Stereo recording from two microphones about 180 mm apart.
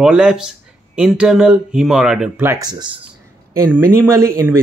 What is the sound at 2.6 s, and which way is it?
Speech, 25° right (ahead or behind).